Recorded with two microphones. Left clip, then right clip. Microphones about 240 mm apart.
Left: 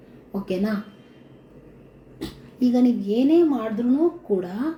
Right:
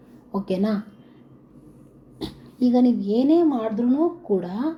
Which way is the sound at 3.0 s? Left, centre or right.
Centre.